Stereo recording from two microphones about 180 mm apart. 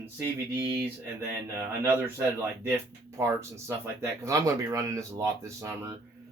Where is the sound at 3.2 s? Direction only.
15° right (ahead or behind).